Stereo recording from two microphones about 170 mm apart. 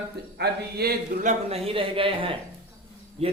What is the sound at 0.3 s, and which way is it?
Speech, 65° right (ahead or behind).